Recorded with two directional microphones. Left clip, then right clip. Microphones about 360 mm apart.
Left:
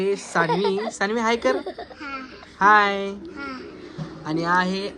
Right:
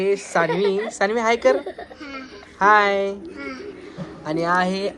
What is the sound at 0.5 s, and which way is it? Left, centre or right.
Speech, centre.